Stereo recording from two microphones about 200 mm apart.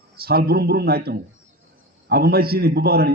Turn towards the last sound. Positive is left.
turn(degrees=-50)  # may be behind; listen again after turning